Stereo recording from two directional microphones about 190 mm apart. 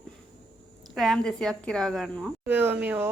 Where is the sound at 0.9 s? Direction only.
Centre (ahead or behind).